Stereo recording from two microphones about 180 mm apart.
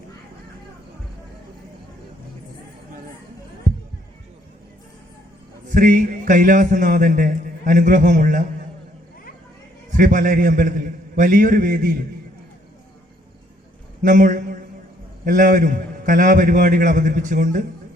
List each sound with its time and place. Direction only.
5.6 s a man's voice: 50° right (ahead or behind)
9.9 s a man's voice: 50° right (ahead or behind)
14.0 s a man's voice: 50° right (ahead or behind)